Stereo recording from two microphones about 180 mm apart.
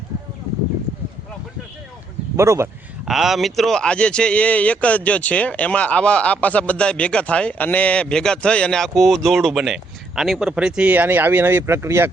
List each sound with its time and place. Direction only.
2.3 s speech: 15° right (ahead or behind)
3.1 s speech: centre (ahead or behind)